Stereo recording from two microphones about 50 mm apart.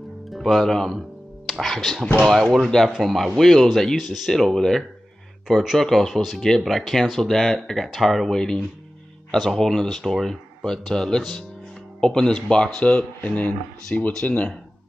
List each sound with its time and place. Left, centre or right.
0.3 s speech: centre
0.9 s music: centre
2.2 s speech: centre; by 13.6 s left
13.9 s speech: centre
14.2 s speech: left